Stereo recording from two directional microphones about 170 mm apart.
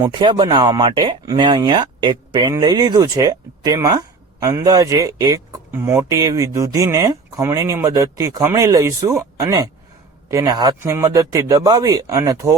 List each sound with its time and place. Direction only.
0.2 s speech: 30° right (ahead or behind)